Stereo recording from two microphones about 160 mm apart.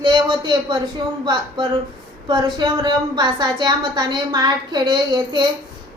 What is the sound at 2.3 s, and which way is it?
A woman's voice, 30° right (ahead or behind).